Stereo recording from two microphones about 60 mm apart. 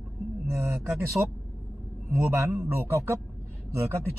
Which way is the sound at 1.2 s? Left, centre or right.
Right.